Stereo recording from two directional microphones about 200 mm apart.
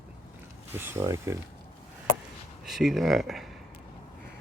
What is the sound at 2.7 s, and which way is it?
Speech, centre (ahead or behind).